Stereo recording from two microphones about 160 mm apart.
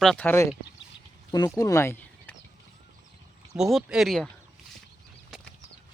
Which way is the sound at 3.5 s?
Centre (ahead or behind).